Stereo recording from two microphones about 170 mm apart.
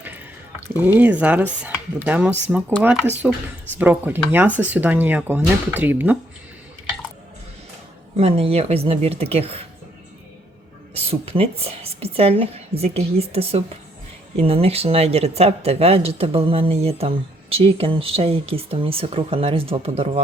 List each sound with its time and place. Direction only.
0.9 s speech: 10° right (ahead or behind)
8.1 s speech: 35° right (ahead or behind)
10.9 s speech: 35° right (ahead or behind)